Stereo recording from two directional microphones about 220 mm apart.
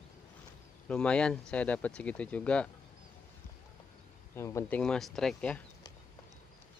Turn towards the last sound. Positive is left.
turn(degrees=5)  # may be behind; listen again after turning